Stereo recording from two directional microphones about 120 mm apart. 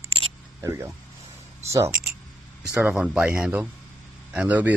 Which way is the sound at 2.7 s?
10° right (ahead or behind).